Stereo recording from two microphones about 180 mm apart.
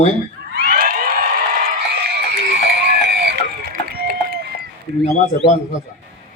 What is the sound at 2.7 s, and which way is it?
Music, 65° right (ahead or behind).